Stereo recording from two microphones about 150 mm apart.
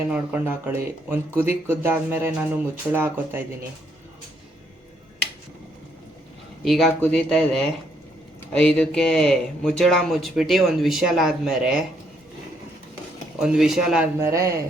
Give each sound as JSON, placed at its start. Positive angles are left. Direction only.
{"t": 0.1, "sound": "speech", "side_deg": -10}
{"t": 6.7, "sound": "speech", "side_deg": 0}
{"t": 13.4, "sound": "speech", "side_deg": -5}
{"t": 14.2, "sound": "speech", "side_deg": -20}